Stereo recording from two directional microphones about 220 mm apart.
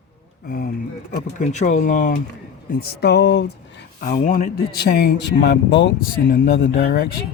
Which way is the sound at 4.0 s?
40° left (ahead or behind).